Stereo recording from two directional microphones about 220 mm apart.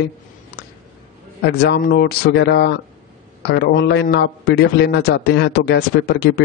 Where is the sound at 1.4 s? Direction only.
45° left (ahead or behind).